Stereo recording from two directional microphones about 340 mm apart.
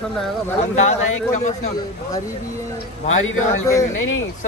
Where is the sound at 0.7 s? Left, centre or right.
Centre.